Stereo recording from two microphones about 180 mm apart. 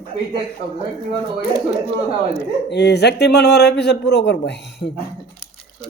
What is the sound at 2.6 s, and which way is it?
A man's voice, 70° left (ahead or behind).